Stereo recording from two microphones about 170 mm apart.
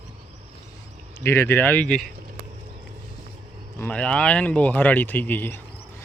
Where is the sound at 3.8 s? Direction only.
5° left (ahead or behind).